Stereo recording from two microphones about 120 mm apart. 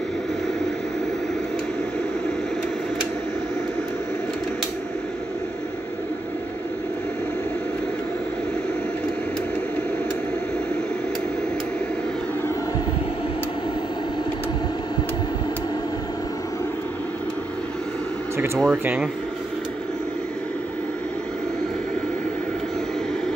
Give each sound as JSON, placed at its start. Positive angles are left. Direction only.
{"t": 18.7, "sound": "speech", "side_deg": -10}